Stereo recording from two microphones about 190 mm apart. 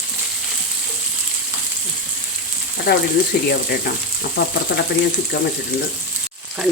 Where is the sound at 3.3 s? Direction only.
60° left (ahead or behind).